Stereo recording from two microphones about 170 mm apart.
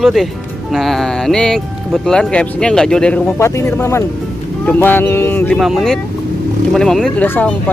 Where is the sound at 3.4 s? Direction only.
15° left (ahead or behind).